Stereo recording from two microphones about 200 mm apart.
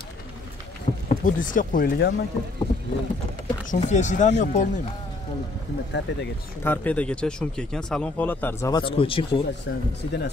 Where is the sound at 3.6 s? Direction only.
40° left (ahead or behind).